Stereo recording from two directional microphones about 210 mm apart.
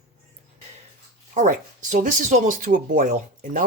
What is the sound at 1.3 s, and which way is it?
Speech, 35° right (ahead or behind).